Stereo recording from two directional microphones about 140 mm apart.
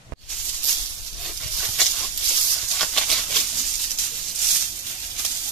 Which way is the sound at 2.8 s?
5° left (ahead or behind).